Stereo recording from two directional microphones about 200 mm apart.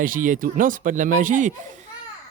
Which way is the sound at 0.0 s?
45° right (ahead or behind).